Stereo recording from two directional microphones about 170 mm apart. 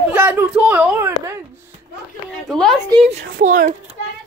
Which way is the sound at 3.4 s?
50° right (ahead or behind).